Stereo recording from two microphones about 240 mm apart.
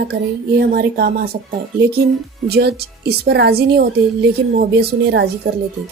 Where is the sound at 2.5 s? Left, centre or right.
Right.